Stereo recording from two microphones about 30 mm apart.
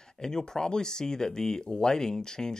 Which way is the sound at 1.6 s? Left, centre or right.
Left.